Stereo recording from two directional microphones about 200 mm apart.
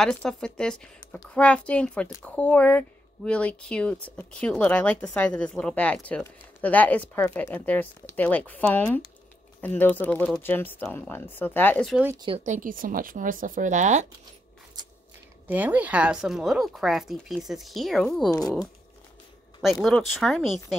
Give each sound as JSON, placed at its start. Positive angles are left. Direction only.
{"t": 0.0, "sound": "speech", "side_deg": 5}
{"t": 12.4, "sound": "speech", "side_deg": -40}
{"t": 14.8, "sound": "biting", "side_deg": -20}
{"t": 15.4, "sound": "speech", "side_deg": -10}
{"t": 19.6, "sound": "speech", "side_deg": 0}